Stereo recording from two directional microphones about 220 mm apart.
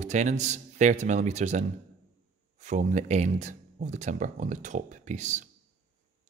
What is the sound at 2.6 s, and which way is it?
Speech, 30° right (ahead or behind).